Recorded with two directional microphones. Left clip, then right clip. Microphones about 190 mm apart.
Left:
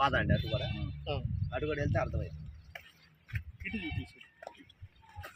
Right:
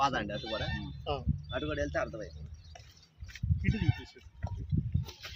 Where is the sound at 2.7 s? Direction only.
25° left (ahead or behind).